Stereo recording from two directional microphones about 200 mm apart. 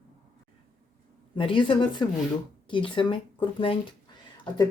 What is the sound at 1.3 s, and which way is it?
Speech, 25° left (ahead or behind).